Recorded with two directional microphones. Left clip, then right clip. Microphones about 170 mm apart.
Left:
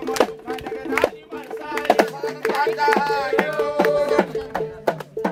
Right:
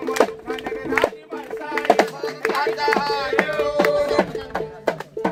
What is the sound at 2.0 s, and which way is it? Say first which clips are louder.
Music: even; 25° left (ahead or behind).